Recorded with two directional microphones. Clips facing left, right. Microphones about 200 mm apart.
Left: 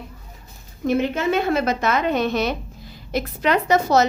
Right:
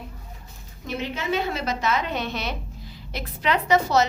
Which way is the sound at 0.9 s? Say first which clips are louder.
Left 8 dB; 50° left (ahead or behind).